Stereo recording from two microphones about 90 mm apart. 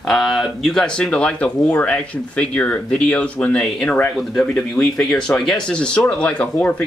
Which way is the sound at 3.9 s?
15° left (ahead or behind).